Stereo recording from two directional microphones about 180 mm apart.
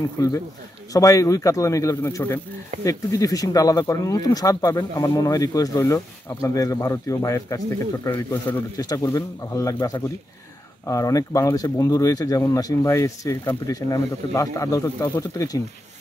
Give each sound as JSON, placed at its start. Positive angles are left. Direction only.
{"t": 0.2, "sound": "speech", "side_deg": 20}